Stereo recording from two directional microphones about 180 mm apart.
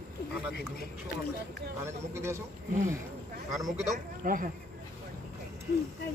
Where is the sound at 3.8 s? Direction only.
45° right (ahead or behind).